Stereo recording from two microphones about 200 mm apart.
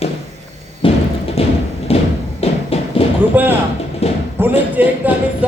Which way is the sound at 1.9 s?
30° left (ahead or behind).